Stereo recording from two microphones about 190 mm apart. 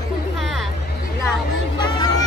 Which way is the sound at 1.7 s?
25° left (ahead or behind).